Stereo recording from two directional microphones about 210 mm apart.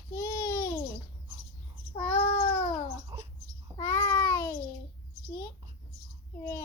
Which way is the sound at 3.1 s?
20° right (ahead or behind).